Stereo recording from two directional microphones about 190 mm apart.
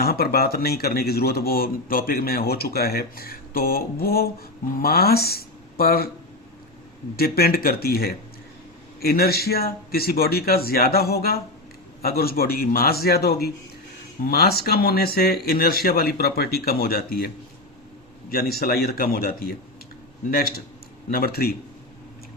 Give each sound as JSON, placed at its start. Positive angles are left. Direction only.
{"t": 0.0, "sound": "speech", "side_deg": 55}
{"t": 7.2, "sound": "speech", "side_deg": 55}
{"t": 21.1, "sound": "speech", "side_deg": 55}